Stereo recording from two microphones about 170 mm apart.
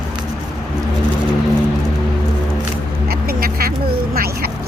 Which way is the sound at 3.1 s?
60° right (ahead or behind).